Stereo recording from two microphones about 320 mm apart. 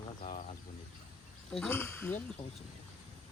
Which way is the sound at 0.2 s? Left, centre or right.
Left.